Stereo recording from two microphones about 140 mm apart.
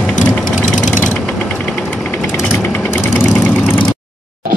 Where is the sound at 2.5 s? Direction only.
10° left (ahead or behind).